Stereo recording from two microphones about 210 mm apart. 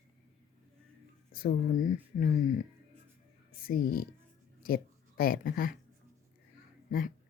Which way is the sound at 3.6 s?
45° left (ahead or behind).